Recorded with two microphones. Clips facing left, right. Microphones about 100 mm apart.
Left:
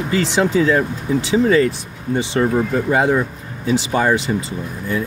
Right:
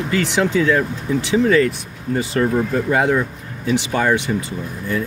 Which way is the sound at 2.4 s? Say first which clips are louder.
Left 1 dB; 15° left (ahead or behind).